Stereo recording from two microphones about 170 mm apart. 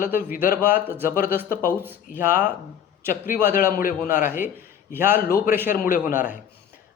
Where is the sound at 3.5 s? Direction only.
55° left (ahead or behind).